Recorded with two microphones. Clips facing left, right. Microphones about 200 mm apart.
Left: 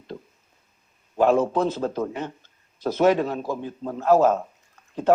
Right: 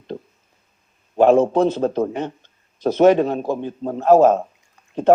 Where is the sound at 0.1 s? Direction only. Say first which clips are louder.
Right 6 dB; 40° right (ahead or behind).